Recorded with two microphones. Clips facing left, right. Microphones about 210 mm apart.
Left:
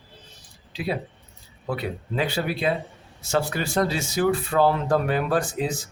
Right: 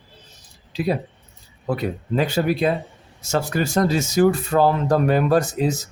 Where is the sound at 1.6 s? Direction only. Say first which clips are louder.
Right 5 dB; 45° right (ahead or behind).